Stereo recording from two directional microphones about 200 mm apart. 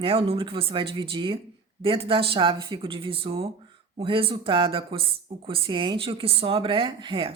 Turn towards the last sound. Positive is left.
turn(degrees=-25)  # may be behind; listen again after turning